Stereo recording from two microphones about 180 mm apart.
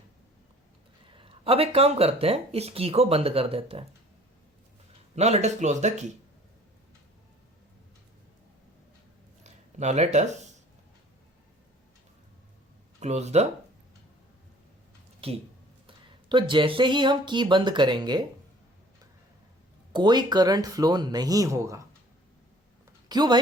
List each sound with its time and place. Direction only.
1.0 s speech: 30° right (ahead or behind)
5.1 s speech: 35° right (ahead or behind)
9.4 s a sound: 40° right (ahead or behind)
13.0 s speech: 40° right (ahead or behind)
15.2 s speech: 30° right (ahead or behind)
19.9 s speech: 25° right (ahead or behind)
23.0 s speech: 20° right (ahead or behind)